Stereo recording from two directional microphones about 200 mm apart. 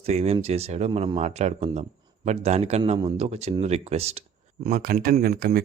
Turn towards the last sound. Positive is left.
turn(degrees=-45)  # may be behind; listen again after turning